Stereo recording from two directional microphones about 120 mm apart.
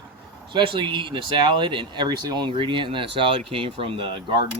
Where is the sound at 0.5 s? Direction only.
45° right (ahead or behind).